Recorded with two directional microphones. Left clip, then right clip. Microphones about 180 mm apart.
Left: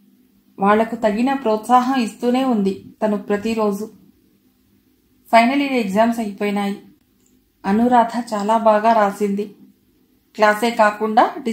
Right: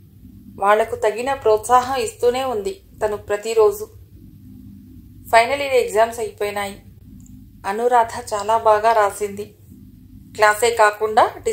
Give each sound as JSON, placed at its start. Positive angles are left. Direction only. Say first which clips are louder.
{"t": 0.6, "sound": "speech", "louder": "even", "side_deg": -30}
{"t": 5.3, "sound": "speech", "louder": "even", "side_deg": -35}